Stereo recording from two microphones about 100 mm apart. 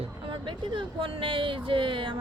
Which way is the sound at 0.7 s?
60° right (ahead or behind).